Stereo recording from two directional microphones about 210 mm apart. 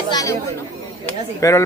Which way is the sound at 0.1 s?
15° left (ahead or behind).